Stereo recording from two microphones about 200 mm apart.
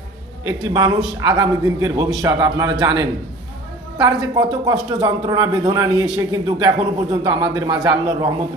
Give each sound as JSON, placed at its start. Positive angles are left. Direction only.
{"t": 0.5, "sound": "speech", "side_deg": -20}